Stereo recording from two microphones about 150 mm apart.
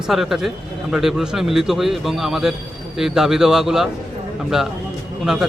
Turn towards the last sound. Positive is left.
turn(degrees=-5)  # may be behind; listen again after turning